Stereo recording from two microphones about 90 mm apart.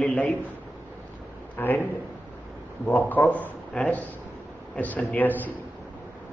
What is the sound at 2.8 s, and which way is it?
A man's voice, 20° left (ahead or behind).